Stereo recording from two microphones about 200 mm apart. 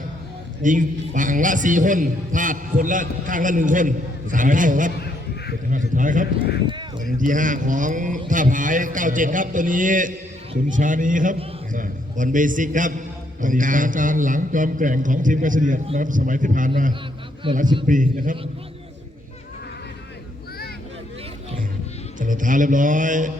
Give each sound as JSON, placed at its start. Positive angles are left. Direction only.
{"t": 0.6, "sound": "a man's voice", "side_deg": -40}
{"t": 4.9, "sound": "a sound", "side_deg": 55}
{"t": 5.9, "sound": "a man's voice", "side_deg": -40}
{"t": 17.4, "sound": "a man's voice", "side_deg": -25}
{"t": 17.8, "sound": "a man's voice", "side_deg": -40}
{"t": 22.2, "sound": "a man's voice", "side_deg": -40}